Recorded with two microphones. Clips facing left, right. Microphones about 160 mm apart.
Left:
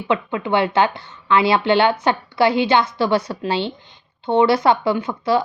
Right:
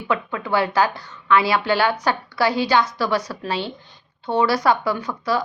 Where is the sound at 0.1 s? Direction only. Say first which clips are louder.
Left 3 dB; 25° left (ahead or behind).